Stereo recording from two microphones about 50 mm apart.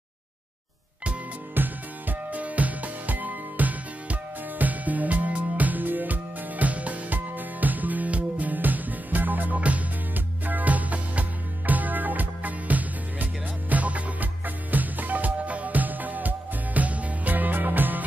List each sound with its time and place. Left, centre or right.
1.5 s music: right